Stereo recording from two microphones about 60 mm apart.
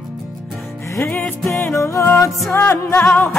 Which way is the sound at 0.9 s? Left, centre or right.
Centre.